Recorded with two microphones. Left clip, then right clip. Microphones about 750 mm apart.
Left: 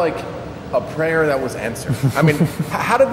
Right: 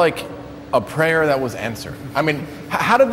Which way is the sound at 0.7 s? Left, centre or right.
Right.